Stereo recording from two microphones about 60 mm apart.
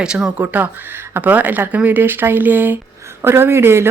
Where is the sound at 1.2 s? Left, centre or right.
Right.